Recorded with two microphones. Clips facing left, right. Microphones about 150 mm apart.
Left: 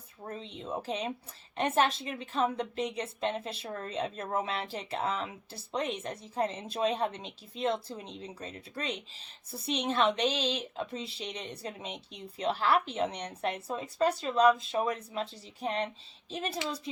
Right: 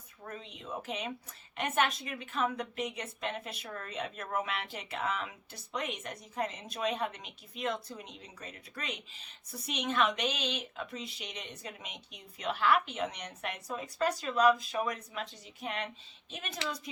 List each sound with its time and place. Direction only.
0.3 s speech: 30° left (ahead or behind)